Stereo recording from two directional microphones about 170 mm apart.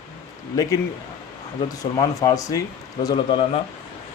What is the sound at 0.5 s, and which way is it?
Speech, 20° left (ahead or behind).